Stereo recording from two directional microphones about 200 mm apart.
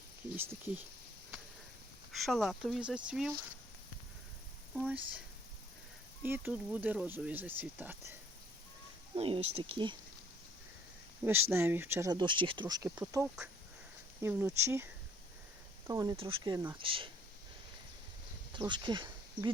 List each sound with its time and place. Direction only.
0.3 s speech: 10° right (ahead or behind)
2.2 s speech: centre (ahead or behind)
4.7 s speech: 5° right (ahead or behind)
6.2 s speech: 10° right (ahead or behind)
9.1 s speech: 30° right (ahead or behind)
11.2 s speech: 10° right (ahead or behind)
15.9 s speech: 20° right (ahead or behind)
18.7 s speech: 25° right (ahead or behind)